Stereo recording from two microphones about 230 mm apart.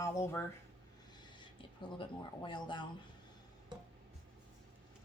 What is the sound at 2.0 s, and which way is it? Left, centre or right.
Speech, left.